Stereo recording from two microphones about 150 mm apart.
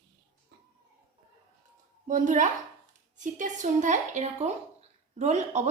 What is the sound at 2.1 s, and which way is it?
A woman's voice, 55° right (ahead or behind).